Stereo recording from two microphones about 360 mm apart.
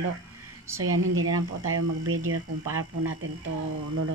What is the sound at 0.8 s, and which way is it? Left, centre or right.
Speech, right.